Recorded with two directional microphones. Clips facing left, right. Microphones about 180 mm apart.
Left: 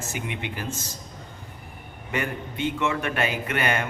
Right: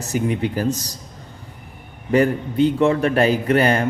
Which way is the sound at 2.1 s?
35° right (ahead or behind).